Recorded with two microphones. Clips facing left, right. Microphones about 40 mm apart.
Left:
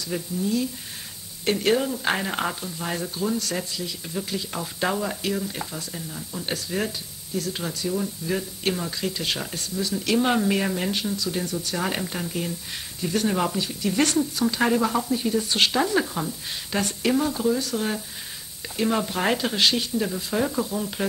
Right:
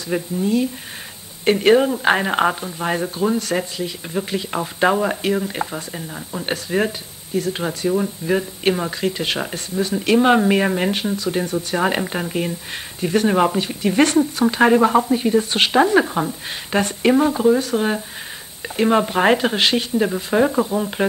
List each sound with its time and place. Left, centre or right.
0.1 s speech: right